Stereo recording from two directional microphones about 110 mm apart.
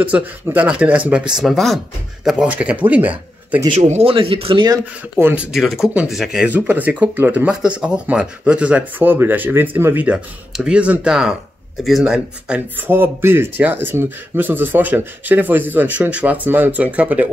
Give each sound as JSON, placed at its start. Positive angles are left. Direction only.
{"t": 0.0, "sound": "speech", "side_deg": -15}
{"t": 3.7, "sound": "speech", "side_deg": -85}
{"t": 4.1, "sound": "speech", "side_deg": -55}
{"t": 5.1, "sound": "speech", "side_deg": -15}
{"t": 10.0, "sound": "speech", "side_deg": -10}